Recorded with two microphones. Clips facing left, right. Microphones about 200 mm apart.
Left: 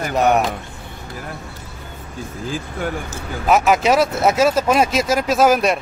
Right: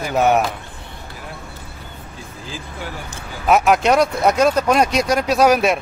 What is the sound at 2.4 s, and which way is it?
Speech, 55° left (ahead or behind).